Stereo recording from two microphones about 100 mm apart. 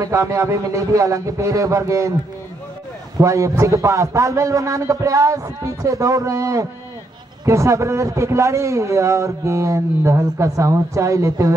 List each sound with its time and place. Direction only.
0.0 s a man's voice: 30° right (ahead or behind)
3.2 s a man's voice: 30° right (ahead or behind)